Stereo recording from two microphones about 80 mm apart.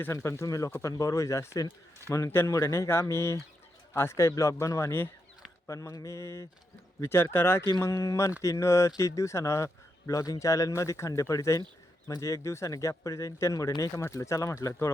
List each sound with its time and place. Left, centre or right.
0.0 s speech: left
7.8 s speech: left